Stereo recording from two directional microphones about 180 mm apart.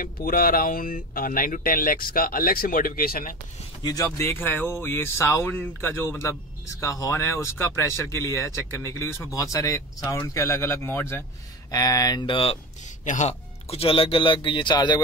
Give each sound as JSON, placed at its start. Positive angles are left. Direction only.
{"t": 0.0, "sound": "speech", "side_deg": 55}
{"t": 3.8, "sound": "speech", "side_deg": 20}
{"t": 12.8, "sound": "speech", "side_deg": 45}